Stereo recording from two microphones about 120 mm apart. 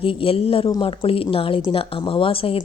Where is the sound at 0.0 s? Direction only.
50° left (ahead or behind).